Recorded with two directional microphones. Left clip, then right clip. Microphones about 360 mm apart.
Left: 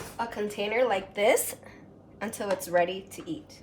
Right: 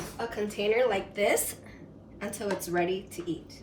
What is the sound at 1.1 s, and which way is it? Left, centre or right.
A woman's voice, centre.